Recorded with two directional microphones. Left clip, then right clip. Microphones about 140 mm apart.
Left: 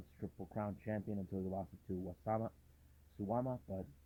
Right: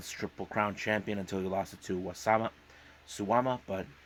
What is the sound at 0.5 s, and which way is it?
Speech, 15° right (ahead or behind).